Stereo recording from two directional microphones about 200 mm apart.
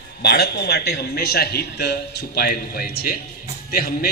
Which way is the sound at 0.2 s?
50° left (ahead or behind).